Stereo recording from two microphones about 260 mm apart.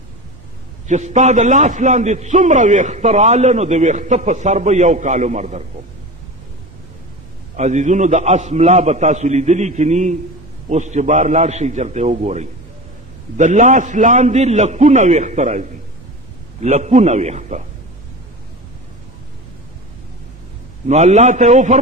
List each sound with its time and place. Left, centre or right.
0.9 s a man's voice: right
7.5 s a man's voice: right
20.8 s a man's voice: right